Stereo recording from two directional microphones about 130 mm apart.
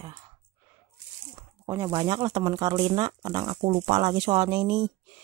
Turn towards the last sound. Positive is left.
turn(degrees=-30)  # may be behind; listen again after turning